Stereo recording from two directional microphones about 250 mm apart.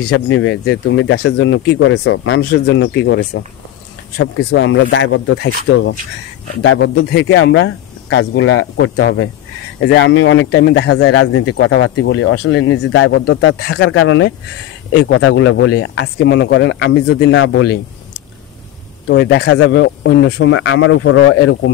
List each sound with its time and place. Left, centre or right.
0.0 s speech: left
9.8 s speech: left
19.0 s speech: left